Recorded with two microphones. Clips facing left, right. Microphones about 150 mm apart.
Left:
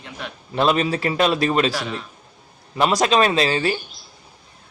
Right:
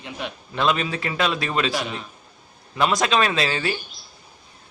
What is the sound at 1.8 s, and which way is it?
Speech, centre (ahead or behind).